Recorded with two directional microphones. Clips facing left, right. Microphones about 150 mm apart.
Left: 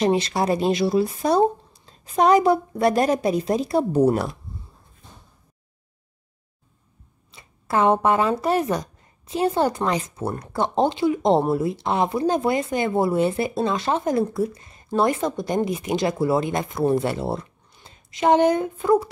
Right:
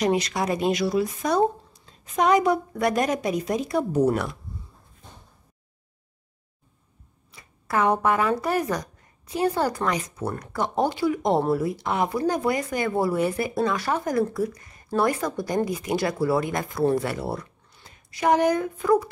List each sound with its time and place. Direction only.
0.0 s a woman's voice: 30° left (ahead or behind)
7.2 s speech: 25° left (ahead or behind)